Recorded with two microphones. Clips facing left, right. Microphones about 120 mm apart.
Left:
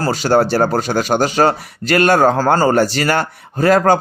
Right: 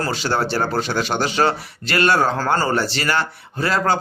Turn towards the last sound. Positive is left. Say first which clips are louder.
# left 7 dB
turn(degrees=45)  # may be behind; listen again after turning